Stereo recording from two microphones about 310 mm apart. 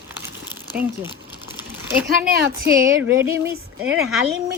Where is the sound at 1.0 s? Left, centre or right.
Centre.